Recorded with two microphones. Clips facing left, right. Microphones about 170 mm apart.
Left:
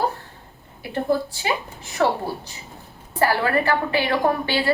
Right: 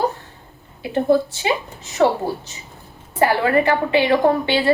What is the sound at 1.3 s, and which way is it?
Speech, 20° right (ahead or behind).